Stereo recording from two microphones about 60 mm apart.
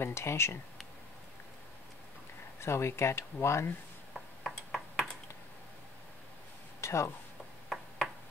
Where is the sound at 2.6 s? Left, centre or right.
Left.